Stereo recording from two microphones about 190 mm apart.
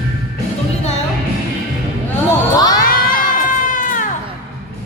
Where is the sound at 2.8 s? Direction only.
45° left (ahead or behind).